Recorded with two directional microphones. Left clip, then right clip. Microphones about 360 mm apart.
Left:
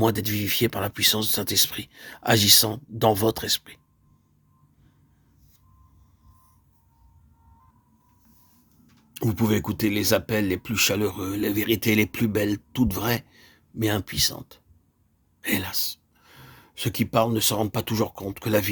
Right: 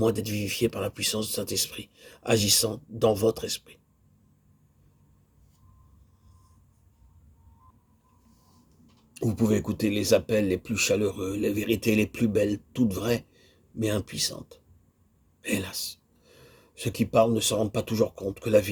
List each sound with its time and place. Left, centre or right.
0.0 s speech: left
9.1 s speech: left